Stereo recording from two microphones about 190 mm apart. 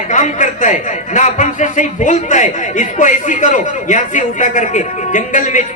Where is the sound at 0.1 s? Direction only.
40° left (ahead or behind).